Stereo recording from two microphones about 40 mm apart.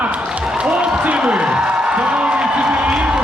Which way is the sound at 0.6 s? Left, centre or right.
Right.